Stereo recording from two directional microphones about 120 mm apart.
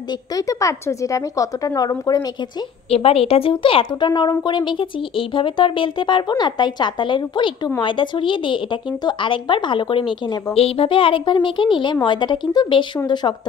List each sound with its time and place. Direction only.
0.3 s a woman's voice: 30° left (ahead or behind)
2.9 s speech: 55° left (ahead or behind)
10.5 s a woman's voice: 55° left (ahead or behind); by 13.3 s 35° left (ahead or behind)